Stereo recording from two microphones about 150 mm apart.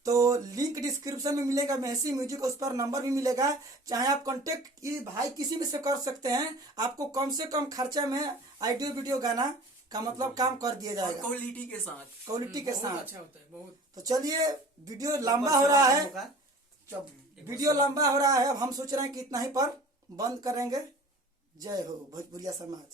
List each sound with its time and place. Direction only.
0.0 s speech: 20° right (ahead or behind)
11.2 s speech: 10° left (ahead or behind)
12.3 s speech: 25° right (ahead or behind)
13.9 s speech: 25° right (ahead or behind)
17.5 s speech: 25° right (ahead or behind)